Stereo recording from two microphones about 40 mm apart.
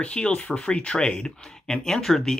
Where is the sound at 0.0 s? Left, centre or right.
Left.